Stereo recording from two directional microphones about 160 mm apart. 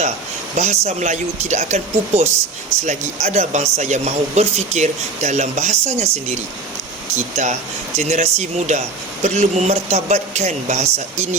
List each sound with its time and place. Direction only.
0.5 s speech: 45° right (ahead or behind)